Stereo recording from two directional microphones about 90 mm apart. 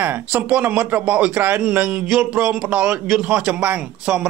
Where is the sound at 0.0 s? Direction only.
20° right (ahead or behind).